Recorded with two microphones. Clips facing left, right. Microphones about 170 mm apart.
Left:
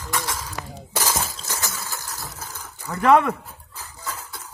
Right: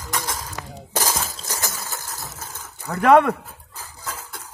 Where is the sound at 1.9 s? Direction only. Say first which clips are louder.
Even; 20° right (ahead or behind).